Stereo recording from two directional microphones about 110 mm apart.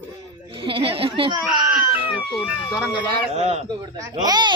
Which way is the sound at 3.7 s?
40° right (ahead or behind).